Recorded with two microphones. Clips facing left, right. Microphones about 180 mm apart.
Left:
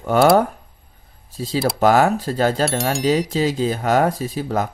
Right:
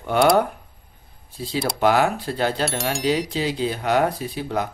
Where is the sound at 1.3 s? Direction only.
40° left (ahead or behind).